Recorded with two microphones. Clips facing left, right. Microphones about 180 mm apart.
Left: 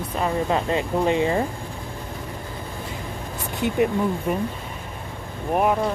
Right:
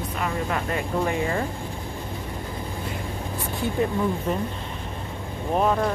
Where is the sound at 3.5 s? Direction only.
20° left (ahead or behind).